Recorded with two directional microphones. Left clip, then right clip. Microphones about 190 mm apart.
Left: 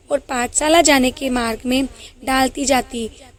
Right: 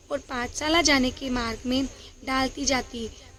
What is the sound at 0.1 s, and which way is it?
A woman's voice, 40° left (ahead or behind).